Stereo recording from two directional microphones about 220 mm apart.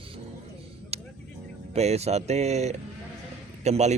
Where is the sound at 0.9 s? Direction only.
30° right (ahead or behind).